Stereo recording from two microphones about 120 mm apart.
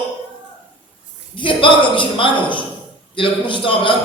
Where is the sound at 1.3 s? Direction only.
45° left (ahead or behind).